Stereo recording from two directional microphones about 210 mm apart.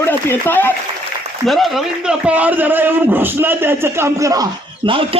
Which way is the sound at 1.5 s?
Centre (ahead or behind).